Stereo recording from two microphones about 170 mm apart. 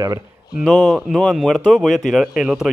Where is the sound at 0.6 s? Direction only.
Centre (ahead or behind).